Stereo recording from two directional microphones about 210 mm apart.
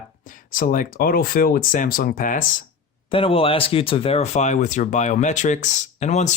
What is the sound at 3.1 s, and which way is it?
Speech, 25° left (ahead or behind).